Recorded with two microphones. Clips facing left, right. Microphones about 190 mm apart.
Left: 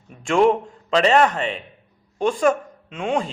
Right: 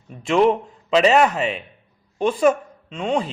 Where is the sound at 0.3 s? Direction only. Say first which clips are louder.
Even; 5° right (ahead or behind).